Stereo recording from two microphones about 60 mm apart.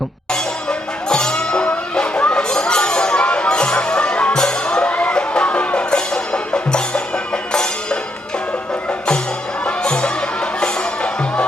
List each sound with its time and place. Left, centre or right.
0.7 s music: centre
9.6 s music: centre